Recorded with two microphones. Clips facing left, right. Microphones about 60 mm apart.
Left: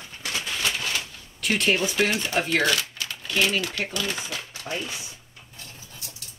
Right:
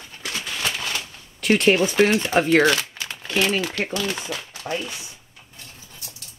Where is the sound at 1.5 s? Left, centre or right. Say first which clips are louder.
Right 6 dB; right.